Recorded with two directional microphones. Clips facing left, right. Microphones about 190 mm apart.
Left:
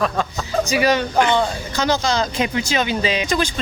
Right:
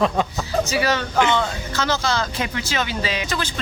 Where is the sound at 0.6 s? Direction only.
15° left (ahead or behind).